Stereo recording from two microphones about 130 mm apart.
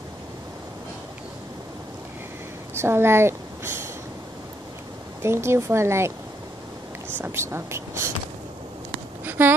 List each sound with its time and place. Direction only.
2.7 s a woman's voice: 20° right (ahead or behind)
5.2 s speech: 20° right (ahead or behind)
7.2 s speech: 20° right (ahead or behind)
9.2 s a sound: 15° right (ahead or behind)